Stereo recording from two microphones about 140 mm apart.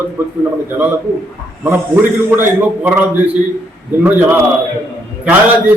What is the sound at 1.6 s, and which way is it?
Speech, 15° right (ahead or behind).